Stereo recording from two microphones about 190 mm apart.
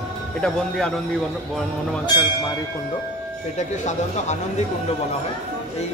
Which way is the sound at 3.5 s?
40° left (ahead or behind).